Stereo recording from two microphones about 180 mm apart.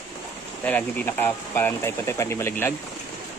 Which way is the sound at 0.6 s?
10° left (ahead or behind).